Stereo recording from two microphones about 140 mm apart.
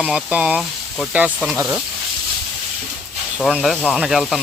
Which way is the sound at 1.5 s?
15° right (ahead or behind).